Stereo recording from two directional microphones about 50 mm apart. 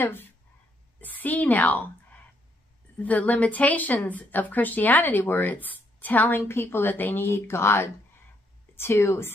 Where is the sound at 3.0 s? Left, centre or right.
Left.